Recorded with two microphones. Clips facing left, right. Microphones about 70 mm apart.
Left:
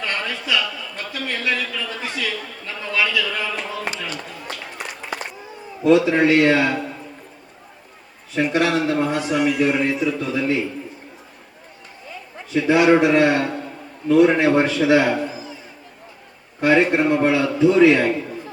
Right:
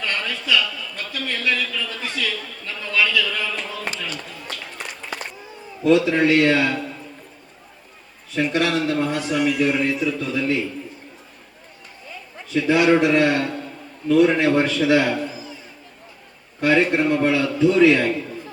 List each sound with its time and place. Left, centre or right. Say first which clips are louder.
0.0 s a sound: left 1 dB; left
5.8 s a man's voice: left 2 dB; left
8.3 s a man's voice: left 2 dB; centre
12.1 s a man's voice: left 1 dB; left
16.6 s a man's voice: left 2 dB; left